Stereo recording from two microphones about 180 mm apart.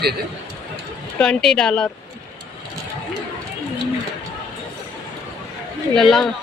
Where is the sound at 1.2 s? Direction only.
5° left (ahead or behind).